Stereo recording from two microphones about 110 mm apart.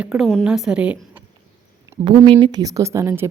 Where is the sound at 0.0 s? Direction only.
5° right (ahead or behind).